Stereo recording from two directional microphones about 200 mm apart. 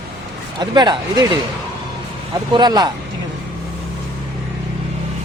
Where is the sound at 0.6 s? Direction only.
20° right (ahead or behind).